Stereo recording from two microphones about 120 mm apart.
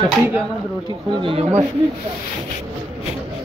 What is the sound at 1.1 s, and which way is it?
Speech, 45° right (ahead or behind).